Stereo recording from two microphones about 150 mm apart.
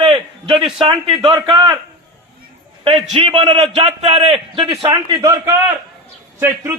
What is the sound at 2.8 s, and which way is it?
A man's voice, 40° right (ahead or behind).